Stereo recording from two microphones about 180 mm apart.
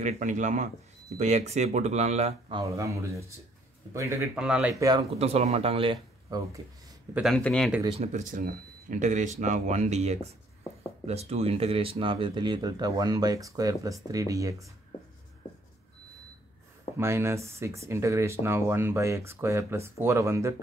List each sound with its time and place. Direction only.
0.0 s speech: 45° right (ahead or behind)
2.6 s speech: 15° right (ahead or behind)
4.4 s speech: 5° right (ahead or behind)
4.7 s speech: 20° right (ahead or behind)
5.2 s speech: 35° right (ahead or behind)
7.3 s speech: 5° left (ahead or behind)
7.8 s speech: 35° right (ahead or behind); by 14.7 s 20° right (ahead or behind)
16.9 s speech: 15° right (ahead or behind)